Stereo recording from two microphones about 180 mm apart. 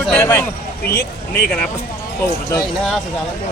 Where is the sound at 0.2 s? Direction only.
15° left (ahead or behind).